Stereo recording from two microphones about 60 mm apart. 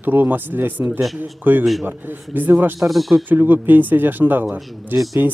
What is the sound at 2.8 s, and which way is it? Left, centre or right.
Speech, centre.